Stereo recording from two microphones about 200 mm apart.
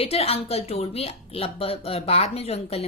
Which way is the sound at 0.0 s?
30° left (ahead or behind).